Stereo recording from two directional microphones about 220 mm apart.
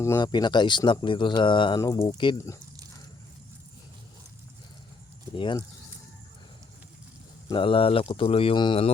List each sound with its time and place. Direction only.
0.0 s speech: 15° left (ahead or behind)
5.4 s speech: 20° left (ahead or behind)
7.5 s speech: 25° left (ahead or behind)